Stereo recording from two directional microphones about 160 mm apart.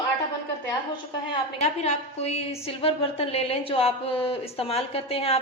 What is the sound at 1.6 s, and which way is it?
A woman's voice, 45° left (ahead or behind).